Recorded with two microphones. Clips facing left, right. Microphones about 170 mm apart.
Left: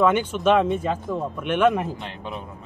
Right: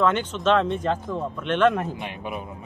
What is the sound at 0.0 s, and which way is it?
Speech, 10° left (ahead or behind).